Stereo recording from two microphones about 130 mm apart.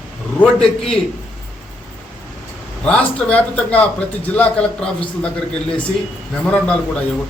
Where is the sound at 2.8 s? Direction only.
10° left (ahead or behind).